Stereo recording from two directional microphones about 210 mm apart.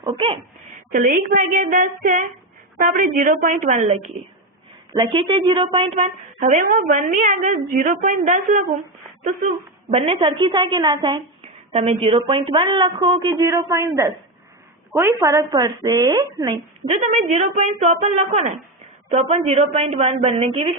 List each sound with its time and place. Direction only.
0.0 s speech: 25° right (ahead or behind)
0.9 s a woman's voice: 40° right (ahead or behind)
4.9 s a woman's voice: 25° right (ahead or behind)
6.0 s a woman's voice: 35° right (ahead or behind)
9.9 s a woman's voice: 25° right (ahead or behind)
17.2 s a woman's voice: 35° right (ahead or behind)